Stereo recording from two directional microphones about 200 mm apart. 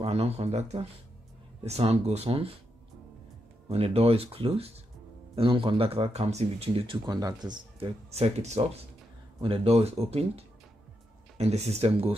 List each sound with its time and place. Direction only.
0.0 s speech: 30° right (ahead or behind)
3.6 s speech: 30° right (ahead or behind)